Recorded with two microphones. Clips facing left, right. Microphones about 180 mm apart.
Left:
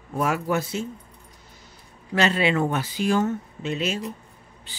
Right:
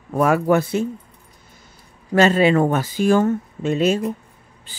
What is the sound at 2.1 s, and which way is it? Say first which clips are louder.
Speech: right 7 dB; 45° right (ahead or behind).